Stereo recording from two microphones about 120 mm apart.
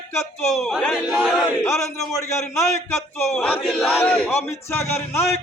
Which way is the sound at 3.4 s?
5° left (ahead or behind).